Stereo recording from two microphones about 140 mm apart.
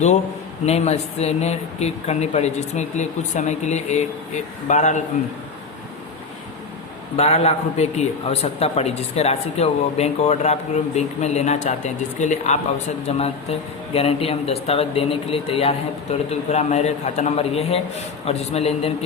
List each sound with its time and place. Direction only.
0.6 s a man's voice: 50° left (ahead or behind)
7.2 s a man's voice: 50° left (ahead or behind)
16.3 s a man's voice: 50° left (ahead or behind)